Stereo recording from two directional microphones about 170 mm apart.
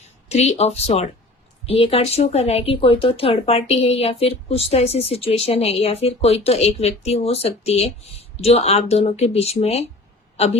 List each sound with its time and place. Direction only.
0.3 s a man's voice: 40° left (ahead or behind)